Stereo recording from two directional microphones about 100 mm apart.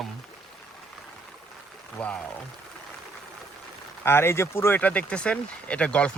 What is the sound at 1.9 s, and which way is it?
Speech, 10° left (ahead or behind).